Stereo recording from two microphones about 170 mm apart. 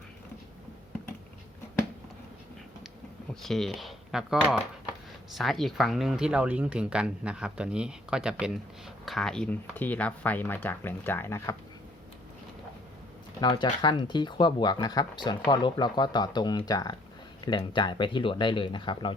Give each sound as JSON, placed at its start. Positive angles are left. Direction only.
{"t": 3.4, "sound": "speech", "side_deg": 0}
{"t": 13.4, "sound": "speech", "side_deg": 25}